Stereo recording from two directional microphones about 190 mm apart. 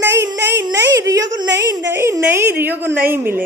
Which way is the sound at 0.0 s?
15° right (ahead or behind).